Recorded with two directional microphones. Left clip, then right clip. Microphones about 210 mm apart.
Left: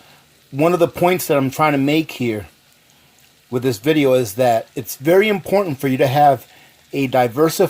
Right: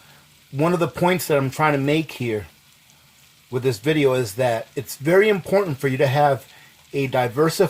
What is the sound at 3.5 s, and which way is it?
Speech, 35° left (ahead or behind).